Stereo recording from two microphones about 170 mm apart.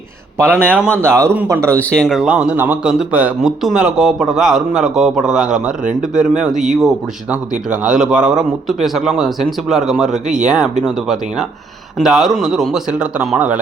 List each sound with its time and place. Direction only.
0.3 s speech: 15° right (ahead or behind)
1.8 s speech: 5° left (ahead or behind)
5.8 s speech: 50° right (ahead or behind)
6.3 s speech: 5° right (ahead or behind)